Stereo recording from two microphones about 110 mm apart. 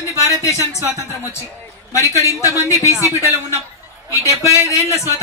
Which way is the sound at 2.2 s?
30° left (ahead or behind).